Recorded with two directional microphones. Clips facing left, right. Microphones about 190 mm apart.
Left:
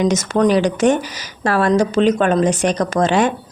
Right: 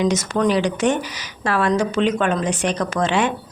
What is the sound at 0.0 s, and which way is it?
Speech, 45° left (ahead or behind).